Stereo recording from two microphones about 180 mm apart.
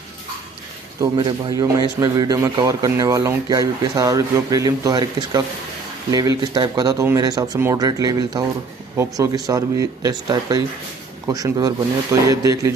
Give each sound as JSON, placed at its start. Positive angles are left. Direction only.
{"t": 1.1, "sound": "a man's voice", "side_deg": -25}